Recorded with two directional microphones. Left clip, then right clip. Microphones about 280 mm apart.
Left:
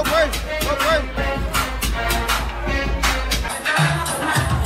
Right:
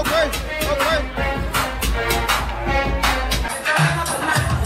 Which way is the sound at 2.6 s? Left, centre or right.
Right.